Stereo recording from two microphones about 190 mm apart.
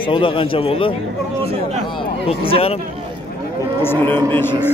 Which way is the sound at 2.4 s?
30° left (ahead or behind).